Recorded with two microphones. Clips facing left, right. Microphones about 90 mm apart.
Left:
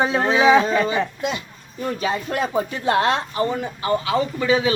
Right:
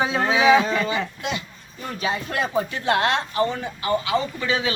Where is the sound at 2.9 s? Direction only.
35° left (ahead or behind).